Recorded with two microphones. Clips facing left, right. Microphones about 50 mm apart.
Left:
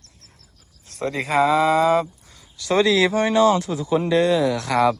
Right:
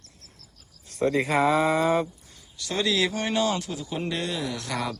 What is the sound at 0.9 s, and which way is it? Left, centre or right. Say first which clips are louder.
Speech: right 1 dB; left.